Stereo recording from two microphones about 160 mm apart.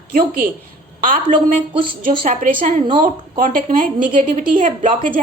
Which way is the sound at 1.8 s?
30° right (ahead or behind).